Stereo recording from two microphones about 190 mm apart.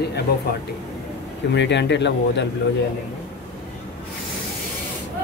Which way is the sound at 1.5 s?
65° left (ahead or behind).